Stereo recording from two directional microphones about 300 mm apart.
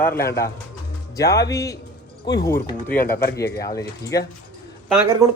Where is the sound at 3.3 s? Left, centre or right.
Centre.